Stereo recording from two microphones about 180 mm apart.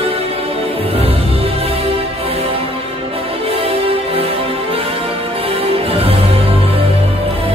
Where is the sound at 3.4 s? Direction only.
30° right (ahead or behind).